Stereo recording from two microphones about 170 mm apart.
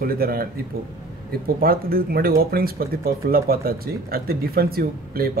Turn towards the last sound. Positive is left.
turn(degrees=-60)  # may be behind; listen again after turning